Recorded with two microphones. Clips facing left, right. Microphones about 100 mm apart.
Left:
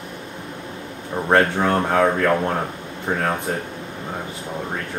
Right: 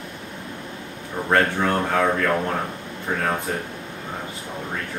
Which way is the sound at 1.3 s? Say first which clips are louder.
Left 3 dB; 25° left (ahead or behind).